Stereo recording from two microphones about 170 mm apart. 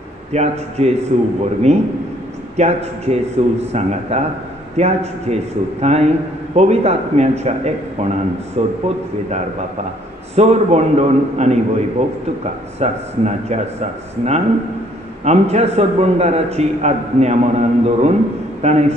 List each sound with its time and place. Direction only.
0.3 s a man's voice: 40° right (ahead or behind)